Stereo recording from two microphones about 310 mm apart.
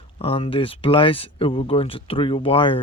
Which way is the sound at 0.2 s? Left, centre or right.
Centre.